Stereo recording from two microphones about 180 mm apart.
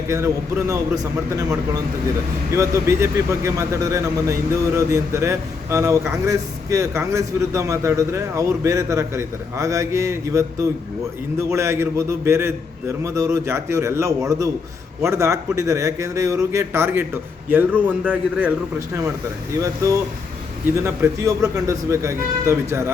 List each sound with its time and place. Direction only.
0.7 s a man's voice: 20° right (ahead or behind)
19.6 s speech: 20° right (ahead or behind)